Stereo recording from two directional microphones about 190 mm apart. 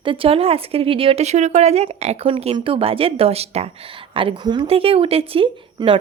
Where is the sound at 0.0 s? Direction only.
30° right (ahead or behind).